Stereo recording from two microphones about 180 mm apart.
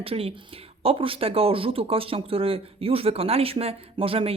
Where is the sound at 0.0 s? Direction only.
30° right (ahead or behind).